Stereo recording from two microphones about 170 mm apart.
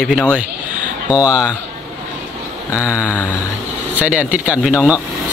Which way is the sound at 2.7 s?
15° left (ahead or behind).